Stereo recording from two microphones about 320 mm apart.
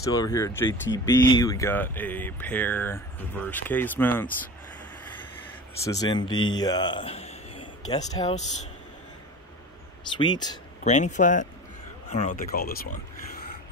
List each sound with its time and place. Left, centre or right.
0.0 s speech: centre
5.9 s a man's voice: centre
10.1 s speech: centre